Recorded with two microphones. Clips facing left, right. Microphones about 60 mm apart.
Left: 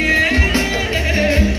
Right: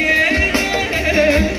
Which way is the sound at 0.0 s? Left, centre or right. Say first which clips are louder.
Even; right.